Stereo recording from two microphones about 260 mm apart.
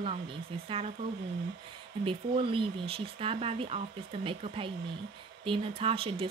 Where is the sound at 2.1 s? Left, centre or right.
Right.